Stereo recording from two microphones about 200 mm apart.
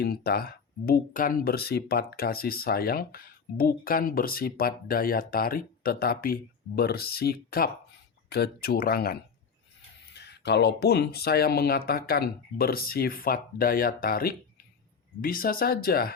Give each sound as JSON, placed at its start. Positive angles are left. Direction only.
{"t": 0.0, "sound": "speech", "side_deg": 50}
{"t": 10.2, "sound": "speech", "side_deg": 55}